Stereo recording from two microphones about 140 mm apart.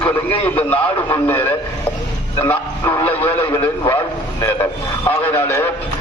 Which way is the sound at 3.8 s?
25° left (ahead or behind).